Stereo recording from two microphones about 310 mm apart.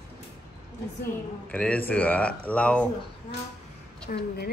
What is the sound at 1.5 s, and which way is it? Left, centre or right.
Speech, centre.